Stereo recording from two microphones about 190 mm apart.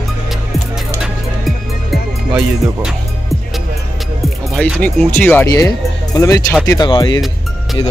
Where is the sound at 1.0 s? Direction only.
Centre (ahead or behind).